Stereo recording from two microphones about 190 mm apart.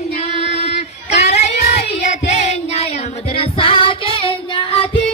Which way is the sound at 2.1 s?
35° left (ahead or behind).